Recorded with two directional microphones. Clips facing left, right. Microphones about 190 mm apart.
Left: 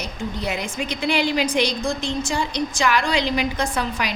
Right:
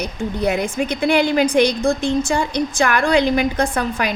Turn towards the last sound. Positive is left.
turn(degrees=-55)  # may be behind; listen again after turning